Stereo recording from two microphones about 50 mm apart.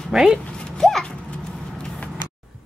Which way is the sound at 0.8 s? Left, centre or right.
Centre.